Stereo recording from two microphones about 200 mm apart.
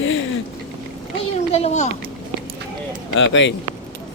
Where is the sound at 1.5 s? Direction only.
35° left (ahead or behind).